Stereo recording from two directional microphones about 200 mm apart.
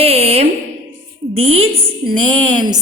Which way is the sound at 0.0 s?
30° right (ahead or behind).